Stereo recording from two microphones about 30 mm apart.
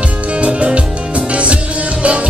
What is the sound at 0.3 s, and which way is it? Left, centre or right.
Music, right.